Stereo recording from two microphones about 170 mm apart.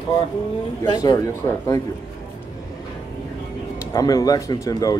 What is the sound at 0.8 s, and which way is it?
Speech, 25° left (ahead or behind).